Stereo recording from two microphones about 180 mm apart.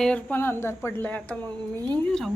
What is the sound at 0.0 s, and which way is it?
A woman's voice, 5° left (ahead or behind).